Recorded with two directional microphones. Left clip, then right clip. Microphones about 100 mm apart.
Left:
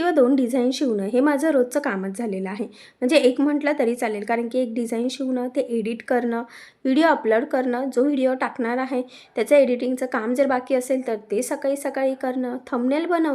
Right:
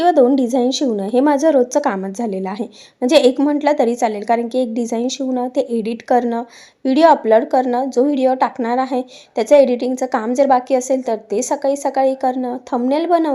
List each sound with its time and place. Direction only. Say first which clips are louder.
0.0 s speech: right 6 dB; 20° right (ahead or behind)